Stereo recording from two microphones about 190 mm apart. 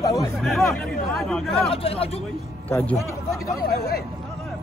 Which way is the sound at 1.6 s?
30° left (ahead or behind).